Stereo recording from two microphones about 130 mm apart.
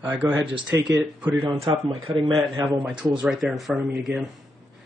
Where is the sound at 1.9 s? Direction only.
45° right (ahead or behind).